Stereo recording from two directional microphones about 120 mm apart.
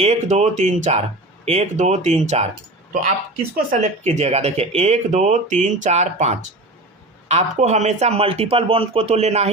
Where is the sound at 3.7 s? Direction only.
75° right (ahead or behind).